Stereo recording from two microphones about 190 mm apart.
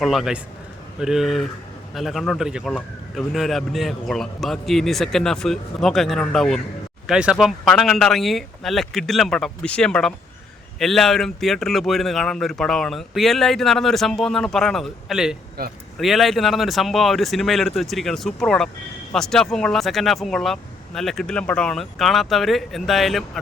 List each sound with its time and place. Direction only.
0.0 s speech: centre (ahead or behind)
15.6 s speech: 50° right (ahead or behind)
16.0 s speech: centre (ahead or behind)